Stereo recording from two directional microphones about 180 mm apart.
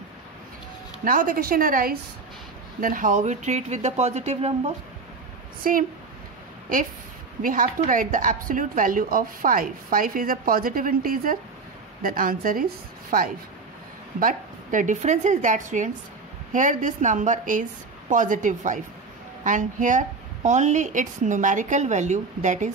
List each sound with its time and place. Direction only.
1.0 s speech: 50° right (ahead or behind)
5.6 s speech: 50° right (ahead or behind)
7.4 s speech: 50° right (ahead or behind)